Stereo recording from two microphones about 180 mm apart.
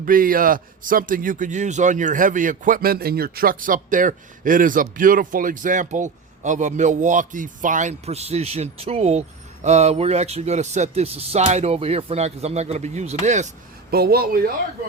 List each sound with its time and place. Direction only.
0.0 s a man's voice: 50° right (ahead or behind)
13.9 s speech: 60° right (ahead or behind)